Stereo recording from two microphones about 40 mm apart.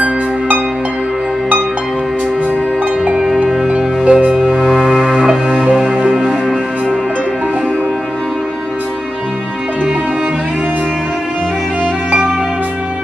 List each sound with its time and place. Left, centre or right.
3.6 s music: right
4.4 s music: centre
12.1 s music: right